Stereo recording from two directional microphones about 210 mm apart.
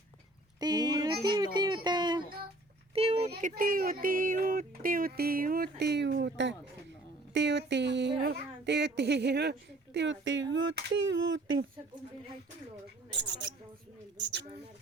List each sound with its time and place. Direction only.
0.6 s music: 20° right (ahead or behind)
2.9 s a sound: 30° right (ahead or behind)
3.5 s music: 45° right (ahead or behind)
7.3 s speech: 55° right (ahead or behind)